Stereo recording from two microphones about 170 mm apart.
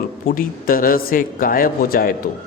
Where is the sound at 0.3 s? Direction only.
55° left (ahead or behind).